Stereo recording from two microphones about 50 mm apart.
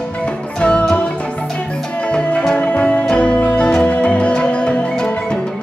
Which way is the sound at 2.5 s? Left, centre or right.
Left.